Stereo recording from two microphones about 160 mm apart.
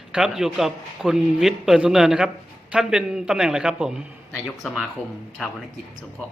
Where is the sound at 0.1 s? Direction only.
5° right (ahead or behind).